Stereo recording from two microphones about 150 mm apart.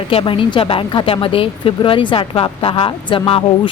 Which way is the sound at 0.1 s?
35° left (ahead or behind).